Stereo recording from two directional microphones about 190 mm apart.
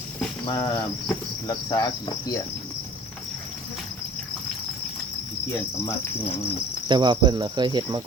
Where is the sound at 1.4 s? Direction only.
20° left (ahead or behind).